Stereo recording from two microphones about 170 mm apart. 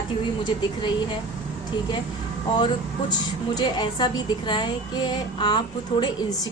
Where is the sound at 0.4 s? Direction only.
25° left (ahead or behind).